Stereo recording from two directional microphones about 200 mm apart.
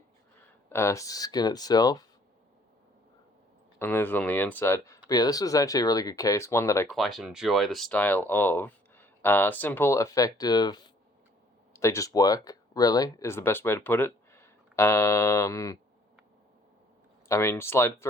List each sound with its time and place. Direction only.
0.7 s speech: 15° left (ahead or behind)
3.8 s speech: 10° left (ahead or behind)
6.9 s speech: centre (ahead or behind); by 15.8 s 15° left (ahead or behind)
17.2 s speech: 15° left (ahead or behind)